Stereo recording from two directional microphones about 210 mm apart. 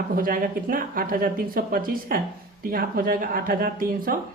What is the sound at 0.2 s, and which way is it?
Speech, 40° right (ahead or behind).